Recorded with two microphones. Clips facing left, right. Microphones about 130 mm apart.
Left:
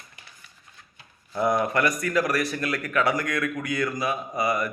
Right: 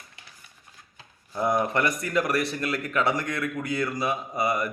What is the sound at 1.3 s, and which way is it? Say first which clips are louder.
Speech: left 1 dB; 20° right (ahead or behind).